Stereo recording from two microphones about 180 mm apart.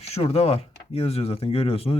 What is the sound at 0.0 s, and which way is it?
Speech, 35° left (ahead or behind).